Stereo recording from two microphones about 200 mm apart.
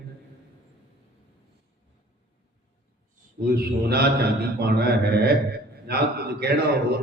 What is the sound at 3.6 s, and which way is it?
Mantra, 55° right (ahead or behind).